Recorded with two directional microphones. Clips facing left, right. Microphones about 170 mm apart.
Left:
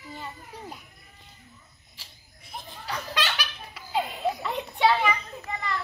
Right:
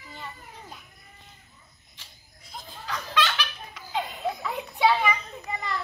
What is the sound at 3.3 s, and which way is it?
Baby laughter, 5° left (ahead or behind).